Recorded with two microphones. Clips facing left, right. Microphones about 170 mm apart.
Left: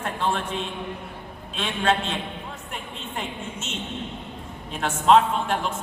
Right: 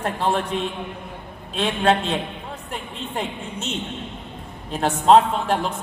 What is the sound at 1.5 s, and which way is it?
Speech, 35° right (ahead or behind).